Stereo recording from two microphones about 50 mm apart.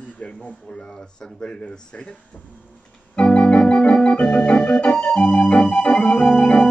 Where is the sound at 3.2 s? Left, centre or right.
Left.